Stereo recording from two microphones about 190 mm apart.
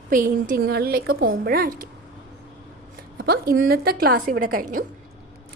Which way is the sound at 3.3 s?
50° right (ahead or behind).